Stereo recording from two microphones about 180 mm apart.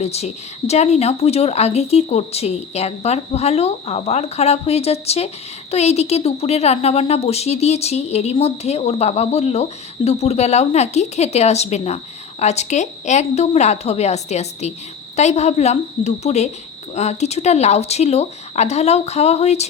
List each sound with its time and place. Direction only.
0.0 s speech: 35° left (ahead or behind)